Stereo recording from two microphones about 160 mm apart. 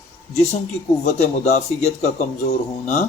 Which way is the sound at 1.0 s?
45° left (ahead or behind).